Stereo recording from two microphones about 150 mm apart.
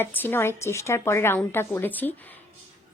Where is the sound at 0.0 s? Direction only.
15° left (ahead or behind).